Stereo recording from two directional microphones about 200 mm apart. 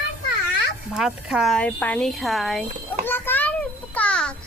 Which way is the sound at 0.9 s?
5° right (ahead or behind).